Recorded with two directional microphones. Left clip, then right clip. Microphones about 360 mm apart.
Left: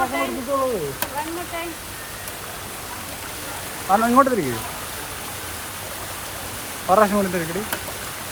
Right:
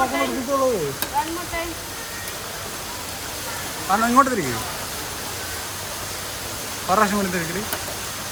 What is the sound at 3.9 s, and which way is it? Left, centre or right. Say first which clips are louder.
Speech: left 1 dB; centre.